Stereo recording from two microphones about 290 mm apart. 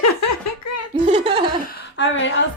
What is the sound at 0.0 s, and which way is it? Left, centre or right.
Giggle, left.